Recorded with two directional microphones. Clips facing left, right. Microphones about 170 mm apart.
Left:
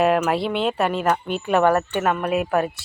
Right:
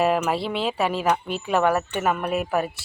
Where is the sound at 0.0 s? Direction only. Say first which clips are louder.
Left 3 dB; centre (ahead or behind).